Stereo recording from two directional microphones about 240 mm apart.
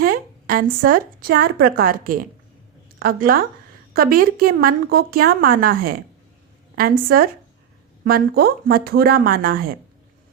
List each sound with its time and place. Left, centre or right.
0.0 s a woman's voice: right